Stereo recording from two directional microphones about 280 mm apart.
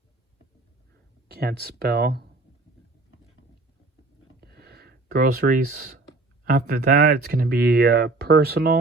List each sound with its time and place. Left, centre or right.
1.3 s speech: right
4.4 s a sound: right
6.4 s speech: right